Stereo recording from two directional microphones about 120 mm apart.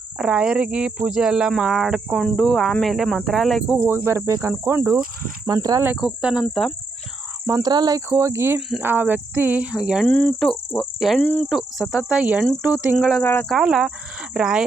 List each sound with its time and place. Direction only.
0.2 s speech: 10° right (ahead or behind)
3.8 s cricket: 20° right (ahead or behind)
6.0 s speech: 5° right (ahead or behind)
7.4 s cricket: 30° right (ahead or behind)
8.8 s speech: 15° right (ahead or behind)
10.1 s cricket: 15° left (ahead or behind)
11.4 s speech: 5° right (ahead or behind)
13.2 s cricket: 15° left (ahead or behind)
13.5 s speech: centre (ahead or behind)